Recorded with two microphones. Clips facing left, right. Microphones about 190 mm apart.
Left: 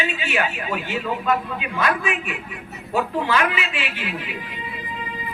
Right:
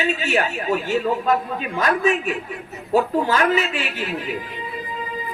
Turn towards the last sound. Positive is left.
turn(degrees=-40)  # may be behind; listen again after turning